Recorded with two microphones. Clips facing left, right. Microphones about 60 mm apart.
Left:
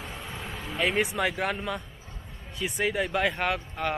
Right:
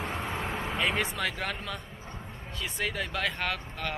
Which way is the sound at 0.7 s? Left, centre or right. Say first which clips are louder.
Left 4 dB; centre.